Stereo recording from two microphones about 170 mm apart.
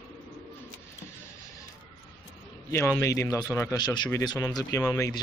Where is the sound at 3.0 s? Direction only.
20° left (ahead or behind).